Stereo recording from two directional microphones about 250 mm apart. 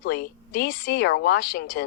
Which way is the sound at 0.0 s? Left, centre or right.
Left.